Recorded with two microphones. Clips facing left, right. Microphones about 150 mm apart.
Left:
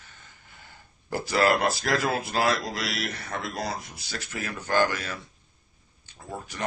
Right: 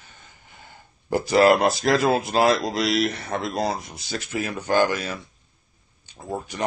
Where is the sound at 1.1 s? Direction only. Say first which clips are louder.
Right 6 dB; 20° right (ahead or behind).